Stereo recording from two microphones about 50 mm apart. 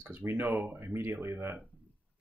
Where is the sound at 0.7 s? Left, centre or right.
Right.